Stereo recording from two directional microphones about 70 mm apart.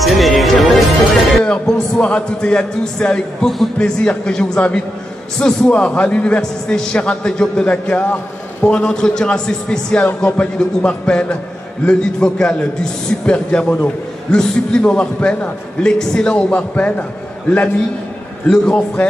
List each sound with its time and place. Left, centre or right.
0.0 s music: centre
1.4 s a man's voice: centre
18.5 s a man's voice: centre